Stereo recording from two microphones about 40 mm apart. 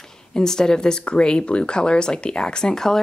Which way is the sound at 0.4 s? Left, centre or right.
Centre.